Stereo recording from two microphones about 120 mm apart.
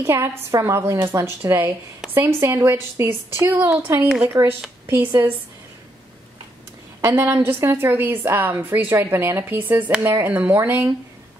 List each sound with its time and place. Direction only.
0.0 s a woman's voice: 20° right (ahead or behind)
7.0 s a woman's voice: 20° right (ahead or behind)